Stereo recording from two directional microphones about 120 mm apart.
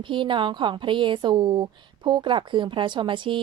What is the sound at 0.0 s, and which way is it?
A woman's voice, 45° right (ahead or behind).